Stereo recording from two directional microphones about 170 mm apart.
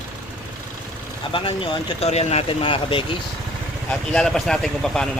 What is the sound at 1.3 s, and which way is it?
Speech, 30° left (ahead or behind).